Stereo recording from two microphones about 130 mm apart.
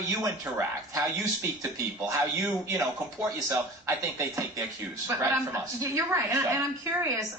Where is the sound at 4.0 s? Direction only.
25° right (ahead or behind).